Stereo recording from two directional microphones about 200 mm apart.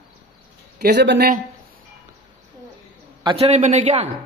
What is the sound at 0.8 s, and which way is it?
Speech, 55° right (ahead or behind).